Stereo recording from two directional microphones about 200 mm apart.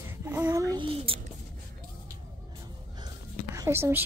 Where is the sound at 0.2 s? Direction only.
10° right (ahead or behind); by 1.2 s 25° right (ahead or behind).